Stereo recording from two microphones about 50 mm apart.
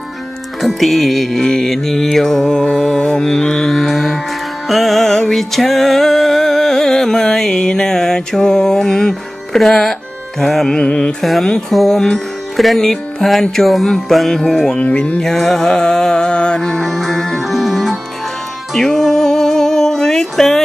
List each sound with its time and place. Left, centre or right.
0.6 s music: centre
10.8 s music: centre
11.1 s music: centre
14.8 s music: left
15.2 s music: centre